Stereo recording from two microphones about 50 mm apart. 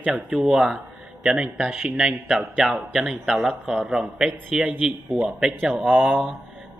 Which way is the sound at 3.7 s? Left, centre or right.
Centre.